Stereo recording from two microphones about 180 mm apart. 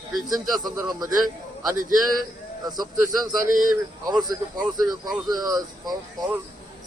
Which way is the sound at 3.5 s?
50° right (ahead or behind).